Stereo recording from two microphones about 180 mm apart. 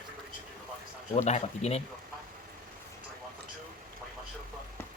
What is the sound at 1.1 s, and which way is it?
Speech, 35° left (ahead or behind).